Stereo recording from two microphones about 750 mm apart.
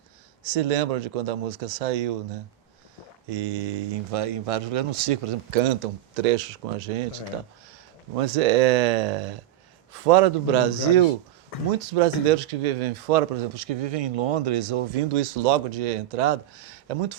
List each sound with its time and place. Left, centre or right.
0.5 s speech: right
3.2 s speech: right
15.1 s speech: right